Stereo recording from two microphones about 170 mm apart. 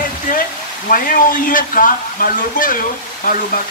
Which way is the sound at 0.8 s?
55° left (ahead or behind).